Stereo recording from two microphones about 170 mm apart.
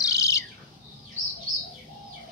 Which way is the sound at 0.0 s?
20° left (ahead or behind).